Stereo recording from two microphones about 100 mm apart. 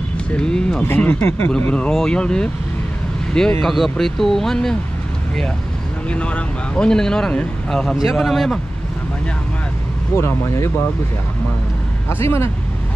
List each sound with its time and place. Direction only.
0.3 s speech: 10° left (ahead or behind)
0.8 s speech: 20° left (ahead or behind)
3.6 s speech: centre (ahead or behind)
6.0 s speech: 10° left (ahead or behind)
10.1 s speech: 30° left (ahead or behind)
12.1 s speech: 25° left (ahead or behind)